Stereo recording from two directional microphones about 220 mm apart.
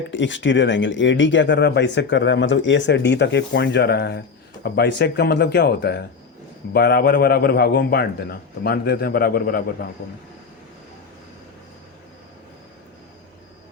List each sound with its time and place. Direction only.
0.1 s a man's voice: 55° left (ahead or behind)